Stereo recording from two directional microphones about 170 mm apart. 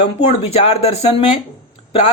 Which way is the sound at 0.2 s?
35° left (ahead or behind).